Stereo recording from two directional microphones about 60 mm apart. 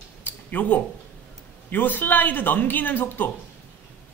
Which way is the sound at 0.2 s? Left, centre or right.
Left.